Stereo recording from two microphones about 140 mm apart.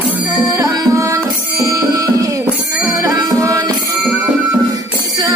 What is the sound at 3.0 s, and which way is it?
Music, 25° right (ahead or behind).